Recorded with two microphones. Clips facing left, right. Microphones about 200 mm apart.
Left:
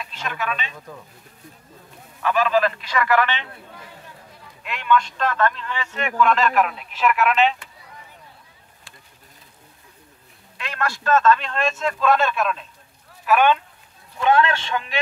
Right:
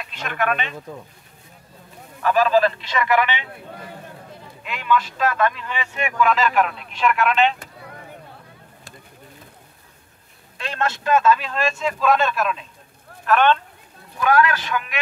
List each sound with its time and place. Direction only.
0.0 s speech: 60° right (ahead or behind)
2.2 s a man's voice: 40° right (ahead or behind); by 3.4 s 15° right (ahead or behind)
4.6 s speech: centre (ahead or behind)
7.7 s a sound: 55° right (ahead or behind)
10.6 s speech: 25° right (ahead or behind); by 13.6 s 10° left (ahead or behind)
14.2 s a man's voice: 25° left (ahead or behind)